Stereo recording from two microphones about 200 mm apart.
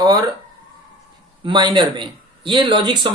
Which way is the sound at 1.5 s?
25° right (ahead or behind).